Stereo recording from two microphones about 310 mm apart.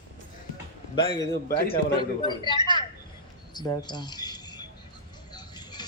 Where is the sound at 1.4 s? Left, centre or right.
Left.